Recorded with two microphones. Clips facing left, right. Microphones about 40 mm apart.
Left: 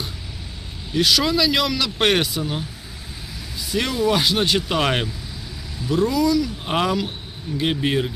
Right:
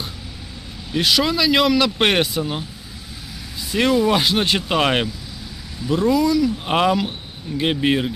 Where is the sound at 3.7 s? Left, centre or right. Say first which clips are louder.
Right 5 dB; right.